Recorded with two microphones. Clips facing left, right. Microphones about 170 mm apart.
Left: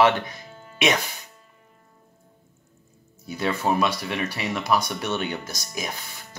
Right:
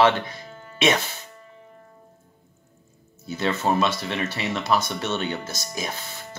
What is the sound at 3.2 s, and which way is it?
Speech, 10° left (ahead or behind).